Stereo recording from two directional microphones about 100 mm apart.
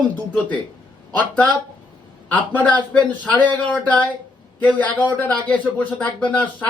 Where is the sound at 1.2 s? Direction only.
15° left (ahead or behind).